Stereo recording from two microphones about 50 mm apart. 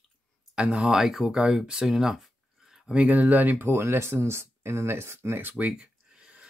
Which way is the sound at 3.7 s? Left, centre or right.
Right.